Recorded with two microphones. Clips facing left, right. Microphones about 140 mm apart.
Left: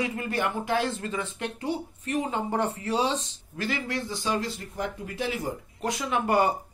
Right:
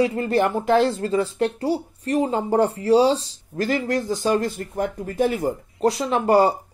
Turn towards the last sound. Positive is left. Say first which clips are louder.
# right 7 dB
turn(degrees=-35)  # may be behind; listen again after turning